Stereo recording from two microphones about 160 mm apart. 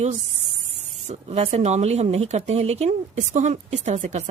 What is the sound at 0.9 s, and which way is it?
Speech, 45° right (ahead or behind).